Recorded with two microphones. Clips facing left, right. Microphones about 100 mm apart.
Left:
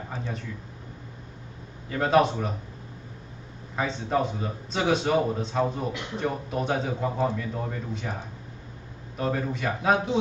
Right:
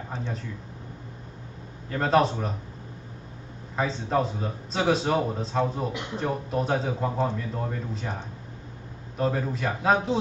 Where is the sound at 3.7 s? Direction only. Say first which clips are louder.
Right 1 dB; centre (ahead or behind).